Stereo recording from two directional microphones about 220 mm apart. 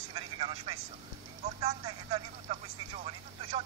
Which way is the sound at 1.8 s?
25° right (ahead or behind).